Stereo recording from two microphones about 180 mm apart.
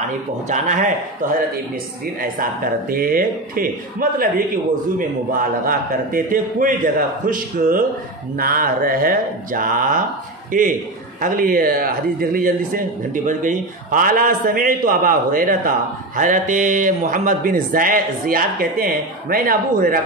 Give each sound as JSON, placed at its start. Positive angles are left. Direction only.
{"t": 0.5, "sound": "speech", "side_deg": -45}
{"t": 2.3, "sound": "speech", "side_deg": -55}